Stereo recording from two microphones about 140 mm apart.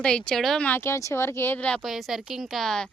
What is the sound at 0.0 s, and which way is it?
Speech, 5° left (ahead or behind).